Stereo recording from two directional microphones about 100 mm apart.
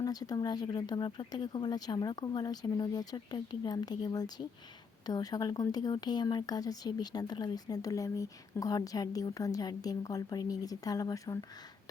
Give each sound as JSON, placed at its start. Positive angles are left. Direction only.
{"t": 0.0, "sound": "speech", "side_deg": 40}